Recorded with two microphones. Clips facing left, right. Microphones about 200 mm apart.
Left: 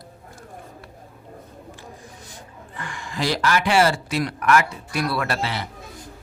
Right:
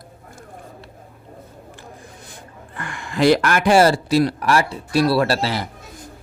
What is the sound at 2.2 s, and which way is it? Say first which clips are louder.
Speech: right 1 dB; 60° right (ahead or behind).